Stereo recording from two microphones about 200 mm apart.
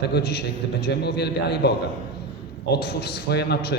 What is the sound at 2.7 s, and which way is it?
A man's voice, 55° left (ahead or behind).